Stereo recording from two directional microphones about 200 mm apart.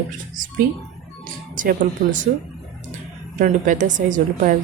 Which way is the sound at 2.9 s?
40° right (ahead or behind).